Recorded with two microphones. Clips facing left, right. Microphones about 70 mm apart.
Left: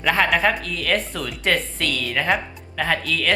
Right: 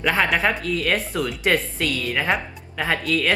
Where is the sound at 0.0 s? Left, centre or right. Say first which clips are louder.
Left 1 dB; centre.